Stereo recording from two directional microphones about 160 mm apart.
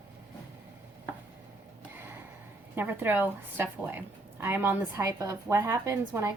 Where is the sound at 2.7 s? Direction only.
15° right (ahead or behind).